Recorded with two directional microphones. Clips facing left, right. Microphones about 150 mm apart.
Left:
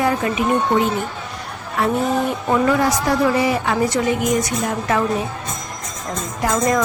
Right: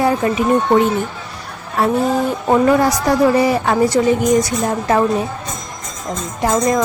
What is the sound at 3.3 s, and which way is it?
A woman's voice, 40° right (ahead or behind).